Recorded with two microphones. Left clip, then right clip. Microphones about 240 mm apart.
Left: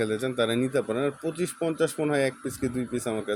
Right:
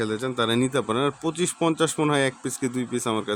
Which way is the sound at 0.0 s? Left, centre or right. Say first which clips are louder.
Right 1 dB; centre.